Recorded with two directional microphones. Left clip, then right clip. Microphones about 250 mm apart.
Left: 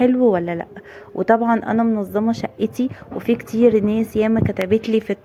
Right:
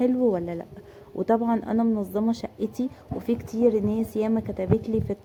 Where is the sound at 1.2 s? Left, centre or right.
Centre.